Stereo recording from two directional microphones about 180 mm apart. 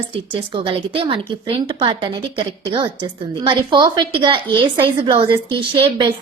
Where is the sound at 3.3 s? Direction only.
25° right (ahead or behind).